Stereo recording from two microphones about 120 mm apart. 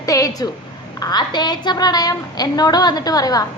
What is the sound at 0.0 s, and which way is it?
A woman's voice, 30° left (ahead or behind).